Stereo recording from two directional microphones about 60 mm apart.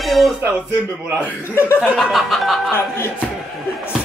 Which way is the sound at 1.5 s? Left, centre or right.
Left.